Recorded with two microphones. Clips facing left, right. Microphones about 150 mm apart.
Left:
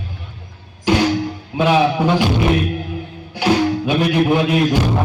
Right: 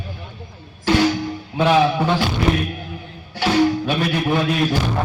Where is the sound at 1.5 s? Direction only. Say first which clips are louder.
Left 1 dB; 15° left (ahead or behind).